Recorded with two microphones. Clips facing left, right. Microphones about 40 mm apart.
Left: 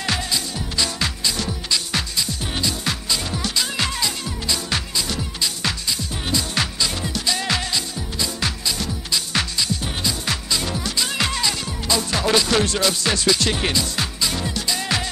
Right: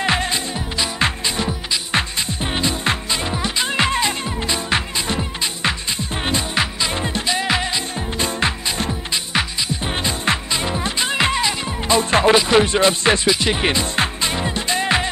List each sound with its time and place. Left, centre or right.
0.0 s music: right
8.2 s music: right
10.0 s music: right
12.4 s speech: right
13.3 s music: centre